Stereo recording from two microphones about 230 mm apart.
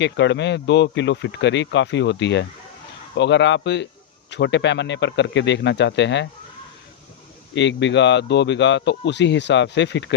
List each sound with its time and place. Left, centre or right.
0.0 s speech: left
7.5 s speech: left